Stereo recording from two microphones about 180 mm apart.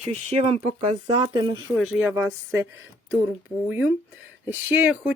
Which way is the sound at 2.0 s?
10° right (ahead or behind).